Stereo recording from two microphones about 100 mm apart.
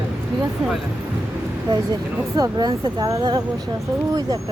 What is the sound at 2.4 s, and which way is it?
Speech, 40° right (ahead or behind).